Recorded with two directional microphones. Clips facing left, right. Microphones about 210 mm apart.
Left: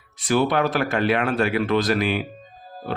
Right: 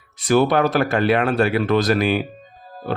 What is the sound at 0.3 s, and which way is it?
Speech, 40° right (ahead or behind).